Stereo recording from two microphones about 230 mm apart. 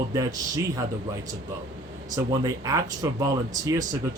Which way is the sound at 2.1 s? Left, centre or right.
Centre.